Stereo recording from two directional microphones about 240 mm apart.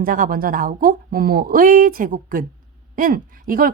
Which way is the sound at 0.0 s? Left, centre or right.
Right.